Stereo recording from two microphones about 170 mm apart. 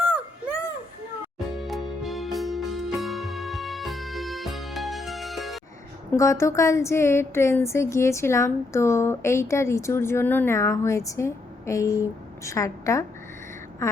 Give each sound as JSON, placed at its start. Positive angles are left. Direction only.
{"t": 1.5, "sound": "music", "side_deg": 0}
{"t": 6.1, "sound": "speech", "side_deg": 15}